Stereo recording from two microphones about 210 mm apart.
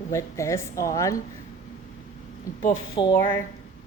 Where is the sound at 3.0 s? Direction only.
20° left (ahead or behind).